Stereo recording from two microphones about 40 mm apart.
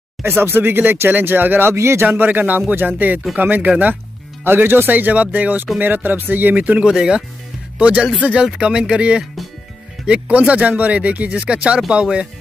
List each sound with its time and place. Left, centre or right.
0.4 s speech: right
2.0 s speech: right
4.5 s speech: right
5.1 s speech: right
6.5 s speech: right
6.8 s speech: right
7.8 s speech: right